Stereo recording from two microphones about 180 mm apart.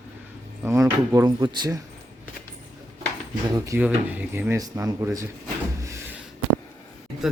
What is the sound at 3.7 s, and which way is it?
A man's voice, 10° right (ahead or behind).